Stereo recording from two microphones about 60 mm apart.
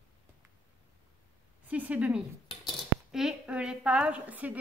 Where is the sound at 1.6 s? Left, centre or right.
Right.